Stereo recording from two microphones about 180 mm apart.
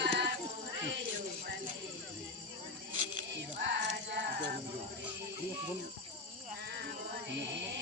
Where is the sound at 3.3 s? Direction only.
70° right (ahead or behind).